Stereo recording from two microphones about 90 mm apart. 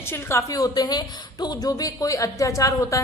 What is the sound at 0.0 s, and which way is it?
A man's voice, 30° left (ahead or behind).